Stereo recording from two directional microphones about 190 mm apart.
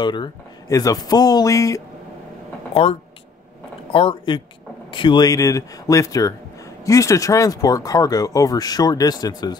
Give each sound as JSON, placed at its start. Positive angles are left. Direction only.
{"t": 0.0, "sound": "speech", "side_deg": 25}
{"t": 2.7, "sound": "speech", "side_deg": 30}